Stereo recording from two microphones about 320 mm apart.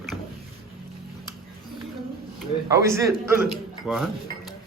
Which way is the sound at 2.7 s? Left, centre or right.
Centre.